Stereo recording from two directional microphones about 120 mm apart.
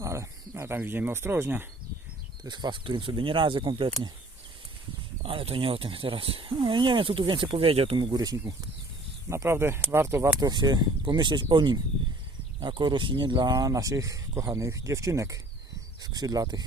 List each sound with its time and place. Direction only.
0.0 s speech: 25° right (ahead or behind)
2.4 s speech: 35° right (ahead or behind)
5.2 s speech: 50° right (ahead or behind)
7.9 s speech: 35° right (ahead or behind)
9.3 s speech: 20° right (ahead or behind)
10.4 s speech: 35° right (ahead or behind)